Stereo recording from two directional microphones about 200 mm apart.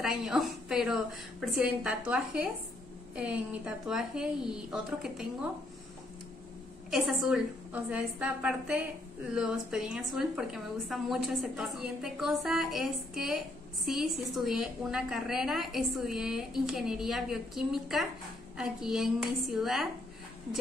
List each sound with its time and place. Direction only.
0.0 s a woman's voice: centre (ahead or behind)
6.9 s a woman's voice: 5° right (ahead or behind)